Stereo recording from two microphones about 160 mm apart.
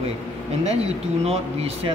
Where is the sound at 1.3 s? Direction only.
40° right (ahead or behind).